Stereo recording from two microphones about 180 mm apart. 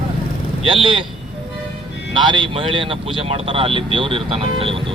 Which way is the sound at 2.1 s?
25° right (ahead or behind).